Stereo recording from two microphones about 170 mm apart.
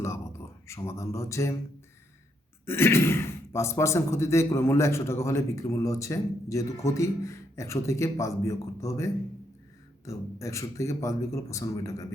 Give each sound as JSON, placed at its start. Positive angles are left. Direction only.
{"t": 0.0, "sound": "a sound", "side_deg": 15}
{"t": 2.6, "sound": "speech", "side_deg": 15}
{"t": 10.1, "sound": "speech", "side_deg": 20}